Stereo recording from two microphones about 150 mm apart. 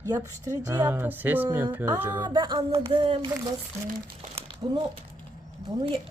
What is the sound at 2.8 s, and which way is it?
Speech, 35° right (ahead or behind).